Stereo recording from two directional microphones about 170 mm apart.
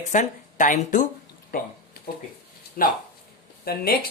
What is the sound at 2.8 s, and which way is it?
Speech, 55° left (ahead or behind).